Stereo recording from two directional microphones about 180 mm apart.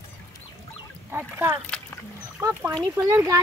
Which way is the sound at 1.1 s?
10° right (ahead or behind).